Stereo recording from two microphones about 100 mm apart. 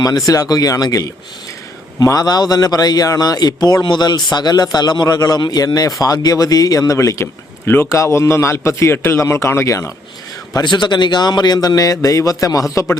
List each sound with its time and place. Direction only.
0.0 s a man's voice: 35° left (ahead or behind)
10.5 s a man's voice: 50° left (ahead or behind)